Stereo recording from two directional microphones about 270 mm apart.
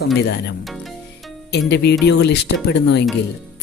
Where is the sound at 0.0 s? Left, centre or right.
Left.